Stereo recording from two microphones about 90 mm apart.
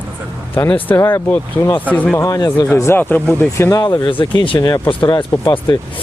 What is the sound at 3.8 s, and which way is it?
Speech, 60° left (ahead or behind).